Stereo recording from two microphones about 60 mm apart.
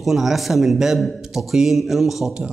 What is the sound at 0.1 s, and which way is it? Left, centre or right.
Speech, centre.